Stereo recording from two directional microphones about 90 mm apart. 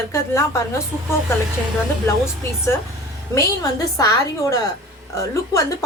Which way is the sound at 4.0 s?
40° left (ahead or behind).